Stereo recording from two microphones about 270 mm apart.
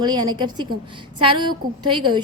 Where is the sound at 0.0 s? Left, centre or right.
Centre.